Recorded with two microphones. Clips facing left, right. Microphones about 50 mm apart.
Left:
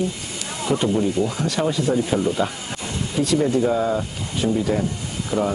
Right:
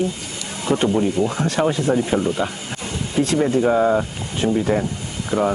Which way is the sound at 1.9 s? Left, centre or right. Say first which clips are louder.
Right 1 dB; right.